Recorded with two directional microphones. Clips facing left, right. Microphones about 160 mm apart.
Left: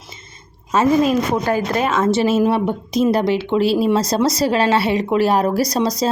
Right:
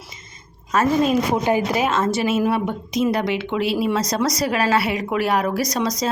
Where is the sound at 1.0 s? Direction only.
5° right (ahead or behind).